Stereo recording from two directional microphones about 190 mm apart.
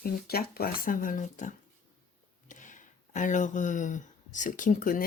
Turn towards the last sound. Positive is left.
turn(degrees=45)  # may be behind; listen again after turning